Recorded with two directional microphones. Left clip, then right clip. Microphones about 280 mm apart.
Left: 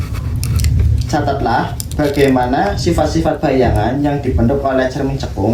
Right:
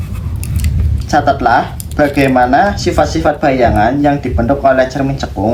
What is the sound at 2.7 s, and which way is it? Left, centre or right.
Speech, right.